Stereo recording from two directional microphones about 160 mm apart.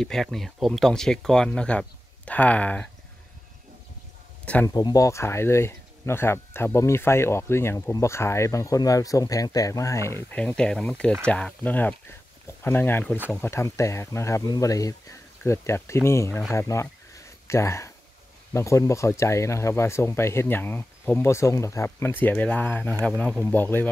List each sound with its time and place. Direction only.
0.0 s speech: centre (ahead or behind)
4.6 s speech: 25° left (ahead or behind)
10.3 s speech: 5° left (ahead or behind)
16.5 s a sound: 15° left (ahead or behind)
18.5 s speech: 20° left (ahead or behind)